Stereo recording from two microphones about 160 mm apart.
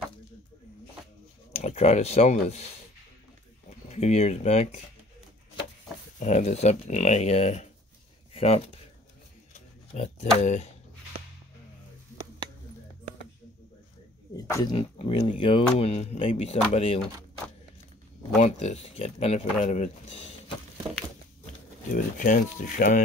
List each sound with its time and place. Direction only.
1.5 s speech: 40° left (ahead or behind)
3.9 s speech: 45° left (ahead or behind)
6.1 s speech: 50° left (ahead or behind)
8.3 s a sound: 40° left (ahead or behind)
14.3 s speech: 25° left (ahead or behind)
18.4 s speech: 45° left (ahead or behind)
21.9 s speech: 55° left (ahead or behind)